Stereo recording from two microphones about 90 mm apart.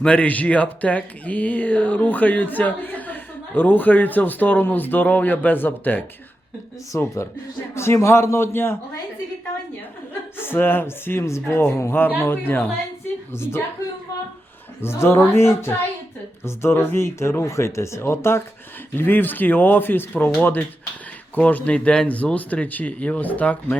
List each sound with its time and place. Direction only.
0.0 s speech: 15° left (ahead or behind)
6.9 s speech: 35° left (ahead or behind)
10.3 s speech: 25° left (ahead or behind)
14.8 s speech: 30° left (ahead or behind)